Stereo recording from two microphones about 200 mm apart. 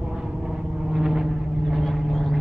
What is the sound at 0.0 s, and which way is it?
Vehicle, 5° right (ahead or behind).